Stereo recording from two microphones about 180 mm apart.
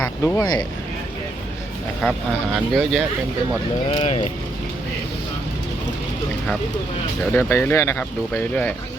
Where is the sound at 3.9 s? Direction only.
30° left (ahead or behind).